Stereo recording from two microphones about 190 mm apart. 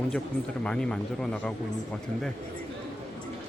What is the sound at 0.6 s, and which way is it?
Speech, 5° left (ahead or behind).